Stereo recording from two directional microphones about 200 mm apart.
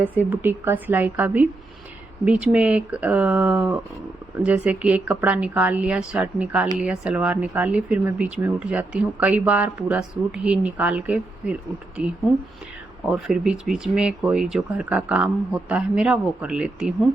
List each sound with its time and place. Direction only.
0.0 s speech: 10° right (ahead or behind)